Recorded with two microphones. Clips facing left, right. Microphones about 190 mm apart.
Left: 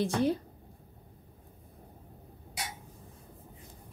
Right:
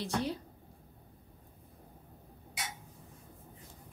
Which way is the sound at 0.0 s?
50° left (ahead or behind).